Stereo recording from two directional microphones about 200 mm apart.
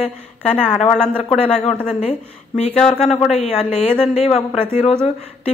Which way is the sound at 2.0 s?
35° left (ahead or behind).